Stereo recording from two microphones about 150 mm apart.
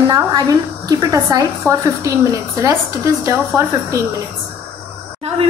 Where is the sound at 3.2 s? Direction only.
20° right (ahead or behind).